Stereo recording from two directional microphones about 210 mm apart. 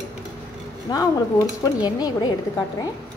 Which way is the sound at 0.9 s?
15° left (ahead or behind).